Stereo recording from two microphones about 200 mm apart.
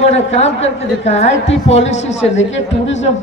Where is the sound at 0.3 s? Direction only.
35° left (ahead or behind).